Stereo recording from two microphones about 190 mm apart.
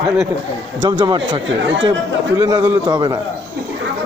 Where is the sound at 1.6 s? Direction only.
70° right (ahead or behind).